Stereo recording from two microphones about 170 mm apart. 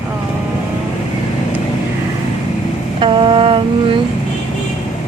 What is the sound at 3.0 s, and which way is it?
Mantra, 30° right (ahead or behind).